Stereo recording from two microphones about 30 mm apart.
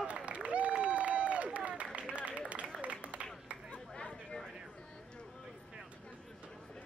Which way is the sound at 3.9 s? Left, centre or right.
Left.